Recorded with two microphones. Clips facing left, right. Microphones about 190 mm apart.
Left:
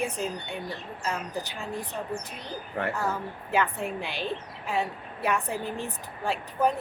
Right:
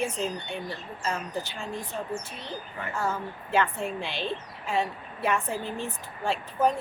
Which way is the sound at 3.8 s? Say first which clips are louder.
Even; 15° left (ahead or behind).